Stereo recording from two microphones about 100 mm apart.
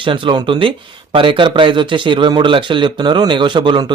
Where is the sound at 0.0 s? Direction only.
55° right (ahead or behind).